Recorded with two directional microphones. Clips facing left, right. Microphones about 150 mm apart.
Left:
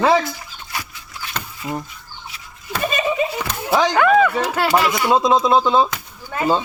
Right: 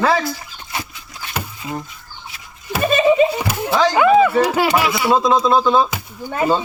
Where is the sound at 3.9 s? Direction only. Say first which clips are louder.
Right 4 dB; 10° right (ahead or behind).